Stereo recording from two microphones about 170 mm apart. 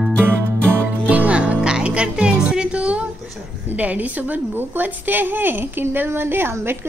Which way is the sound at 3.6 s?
10° right (ahead or behind).